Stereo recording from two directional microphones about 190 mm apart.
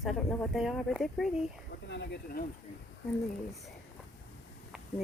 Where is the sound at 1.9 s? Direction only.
65° left (ahead or behind).